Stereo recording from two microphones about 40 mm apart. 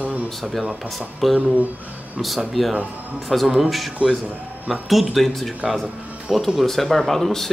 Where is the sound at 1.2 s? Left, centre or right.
Centre.